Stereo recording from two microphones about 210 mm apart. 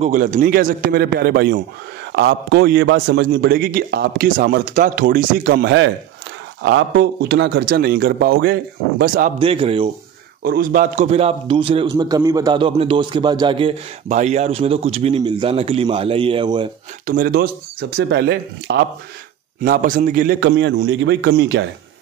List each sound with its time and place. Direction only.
0.0 s a man's voice: 35° right (ahead or behind)
9.4 s a man's voice: 25° right (ahead or behind)
10.4 s a man's voice: 45° right (ahead or behind); by 16.6 s 20° right (ahead or behind)
17.0 s a man's voice: 40° right (ahead or behind)
19.6 s a man's voice: 40° right (ahead or behind); by 21.6 s 60° right (ahead or behind)